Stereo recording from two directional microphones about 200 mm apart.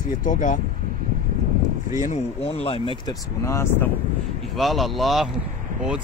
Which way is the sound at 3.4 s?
15° left (ahead or behind).